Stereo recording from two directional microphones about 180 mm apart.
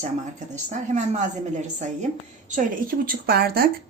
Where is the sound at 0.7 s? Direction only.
40° right (ahead or behind).